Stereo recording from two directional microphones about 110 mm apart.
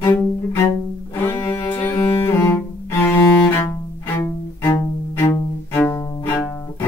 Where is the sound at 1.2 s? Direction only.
20° left (ahead or behind).